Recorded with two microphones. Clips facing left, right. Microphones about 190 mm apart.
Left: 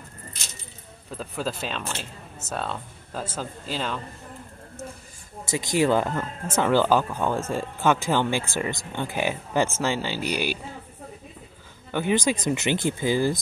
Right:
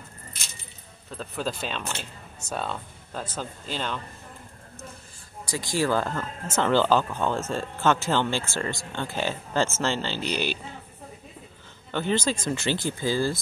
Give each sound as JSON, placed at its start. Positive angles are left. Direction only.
{"t": 1.1, "sound": "speech", "side_deg": 5}
{"t": 5.4, "sound": "speech", "side_deg": 20}
{"t": 11.9, "sound": "speech", "side_deg": 10}